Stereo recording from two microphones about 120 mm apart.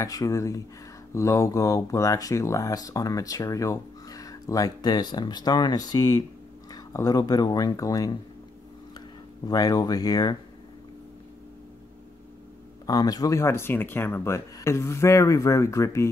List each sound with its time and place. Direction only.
0.0 s speech: 30° left (ahead or behind)
9.5 s speech: 30° left (ahead or behind)
12.8 s speech: 30° left (ahead or behind)